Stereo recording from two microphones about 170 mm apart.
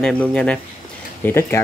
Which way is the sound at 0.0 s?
5° left (ahead or behind).